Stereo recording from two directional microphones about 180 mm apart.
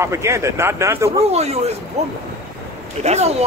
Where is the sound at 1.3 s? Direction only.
35° right (ahead or behind).